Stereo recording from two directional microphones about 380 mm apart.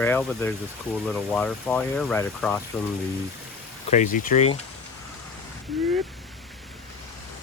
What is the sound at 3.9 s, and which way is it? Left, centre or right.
Speech, centre.